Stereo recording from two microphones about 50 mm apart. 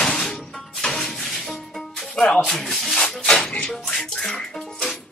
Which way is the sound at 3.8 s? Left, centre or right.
Centre.